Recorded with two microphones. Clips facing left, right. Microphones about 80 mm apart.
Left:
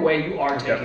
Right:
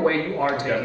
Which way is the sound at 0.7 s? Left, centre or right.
Left.